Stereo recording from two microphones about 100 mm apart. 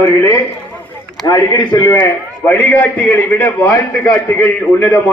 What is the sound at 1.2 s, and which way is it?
Speech, 45° left (ahead or behind).